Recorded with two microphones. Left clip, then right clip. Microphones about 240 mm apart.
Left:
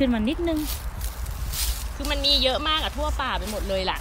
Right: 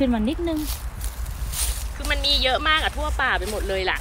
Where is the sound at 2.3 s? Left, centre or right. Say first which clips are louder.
Right 3 dB; centre.